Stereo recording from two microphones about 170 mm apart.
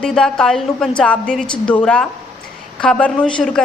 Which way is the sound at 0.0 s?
5° left (ahead or behind).